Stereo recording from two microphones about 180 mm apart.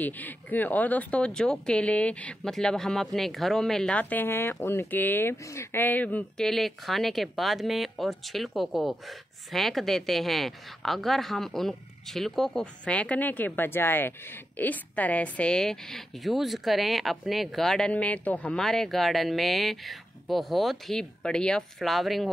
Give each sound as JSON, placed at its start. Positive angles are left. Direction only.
{"t": 0.0, "sound": "speech", "side_deg": 10}